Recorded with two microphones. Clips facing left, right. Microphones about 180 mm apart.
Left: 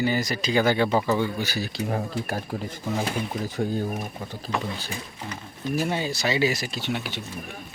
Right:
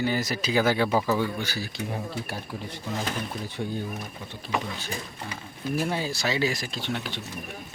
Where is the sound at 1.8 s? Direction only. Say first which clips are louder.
Left 5 dB; 55° left (ahead or behind).